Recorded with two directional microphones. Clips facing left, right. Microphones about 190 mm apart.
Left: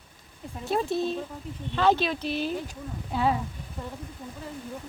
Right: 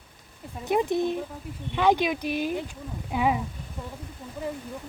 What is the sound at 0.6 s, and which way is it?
Speech, 15° right (ahead or behind).